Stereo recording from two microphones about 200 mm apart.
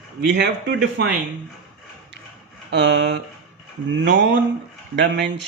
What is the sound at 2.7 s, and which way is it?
Speech, 60° right (ahead or behind).